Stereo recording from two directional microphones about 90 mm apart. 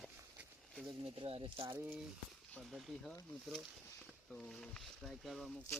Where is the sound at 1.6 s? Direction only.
25° right (ahead or behind).